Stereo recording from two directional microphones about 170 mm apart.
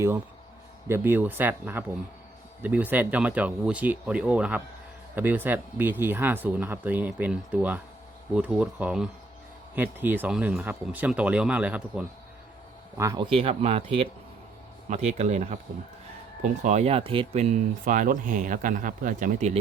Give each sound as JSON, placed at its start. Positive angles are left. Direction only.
{"t": 0.9, "sound": "speech", "side_deg": -15}
{"t": 13.0, "sound": "speech", "side_deg": -20}
{"t": 13.3, "sound": "speech", "side_deg": -35}